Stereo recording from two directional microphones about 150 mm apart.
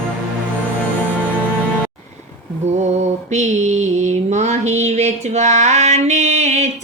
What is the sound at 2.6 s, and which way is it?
Mantra, 50° right (ahead or behind).